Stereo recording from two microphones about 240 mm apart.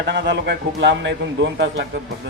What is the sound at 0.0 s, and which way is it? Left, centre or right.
A man's voice, right.